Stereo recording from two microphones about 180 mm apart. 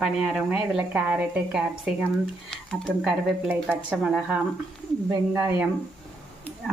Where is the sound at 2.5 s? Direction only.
5° left (ahead or behind); by 5.7 s 10° right (ahead or behind).